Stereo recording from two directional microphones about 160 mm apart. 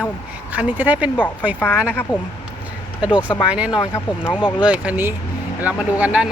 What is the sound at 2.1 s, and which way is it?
Speech, 10° right (ahead or behind).